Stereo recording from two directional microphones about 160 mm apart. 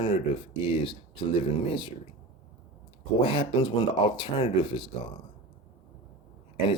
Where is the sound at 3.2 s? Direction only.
30° left (ahead or behind).